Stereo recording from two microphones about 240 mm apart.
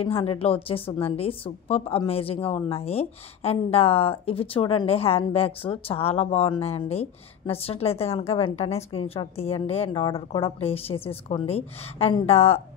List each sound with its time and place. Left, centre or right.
0.0 s a woman's voice: left